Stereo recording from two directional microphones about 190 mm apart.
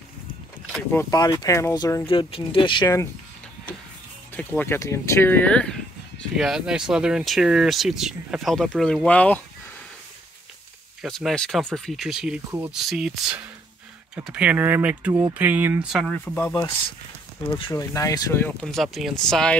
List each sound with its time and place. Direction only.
1.1 s speech: 20° left (ahead or behind)
2.0 s speech: 30° left (ahead or behind)
4.4 s speech: 10° left (ahead or behind)
11.0 s speech: centre (ahead or behind)
12.8 s speech: centre (ahead or behind)
16.1 s speech: 10° left (ahead or behind)
17.5 s speech: 25° left (ahead or behind); by 19.5 s 5° left (ahead or behind)